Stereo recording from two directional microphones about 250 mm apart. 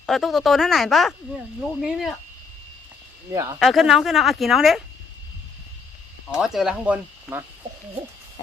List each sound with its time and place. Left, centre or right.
0.0 s speech: centre
3.6 s speech: centre
6.2 s speech: centre